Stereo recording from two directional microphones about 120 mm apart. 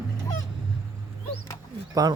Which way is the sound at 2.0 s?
35° right (ahead or behind).